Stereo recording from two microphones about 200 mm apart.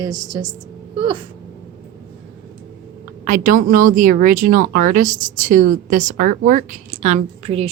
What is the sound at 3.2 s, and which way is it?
Speech, 40° right (ahead or behind).